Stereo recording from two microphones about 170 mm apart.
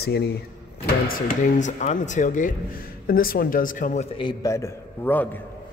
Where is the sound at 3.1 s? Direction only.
60° left (ahead or behind).